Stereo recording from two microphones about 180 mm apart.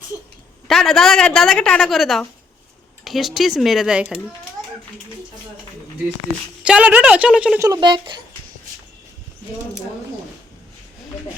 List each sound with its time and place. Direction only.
0.7 s a woman's voice: centre (ahead or behind)
6.6 s a woman's voice: 5° right (ahead or behind)
7.6 s speech: 25° right (ahead or behind)